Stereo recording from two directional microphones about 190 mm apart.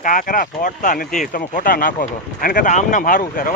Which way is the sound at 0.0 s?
45° left (ahead or behind).